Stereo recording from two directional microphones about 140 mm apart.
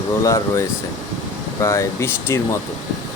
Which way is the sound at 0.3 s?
20° left (ahead or behind).